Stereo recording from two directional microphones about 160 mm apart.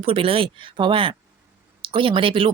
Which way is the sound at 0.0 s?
35° right (ahead or behind).